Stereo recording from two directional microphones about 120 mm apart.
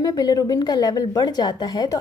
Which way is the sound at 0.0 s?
30° left (ahead or behind).